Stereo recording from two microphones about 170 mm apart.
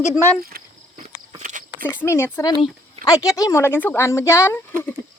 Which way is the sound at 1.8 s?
15° left (ahead or behind).